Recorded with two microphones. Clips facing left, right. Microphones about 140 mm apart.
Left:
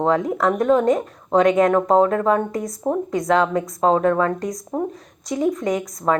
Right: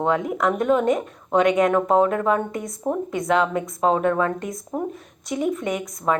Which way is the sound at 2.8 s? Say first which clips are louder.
Left 2 dB; 5° left (ahead or behind).